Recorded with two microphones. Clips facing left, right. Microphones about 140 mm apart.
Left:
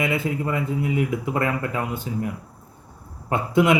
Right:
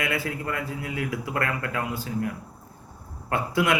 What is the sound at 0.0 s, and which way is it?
A man's voice, 20° left (ahead or behind).